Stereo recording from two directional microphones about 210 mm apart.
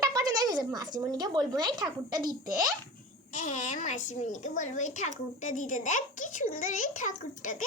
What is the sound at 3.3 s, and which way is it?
A woman's voice, 35° left (ahead or behind).